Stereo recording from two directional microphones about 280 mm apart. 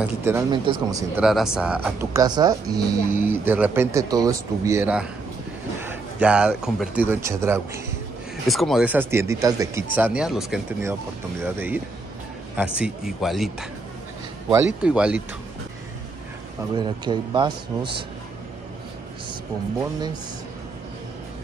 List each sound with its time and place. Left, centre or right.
0.0 s speech: centre
5.8 s a sound: centre
7.1 s speech: centre
14.8 s speech: centre
16.7 s speech: centre